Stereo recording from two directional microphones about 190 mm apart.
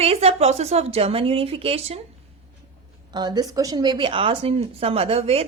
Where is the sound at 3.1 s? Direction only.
20° right (ahead or behind).